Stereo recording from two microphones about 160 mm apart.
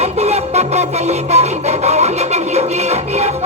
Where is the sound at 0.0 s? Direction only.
40° right (ahead or behind).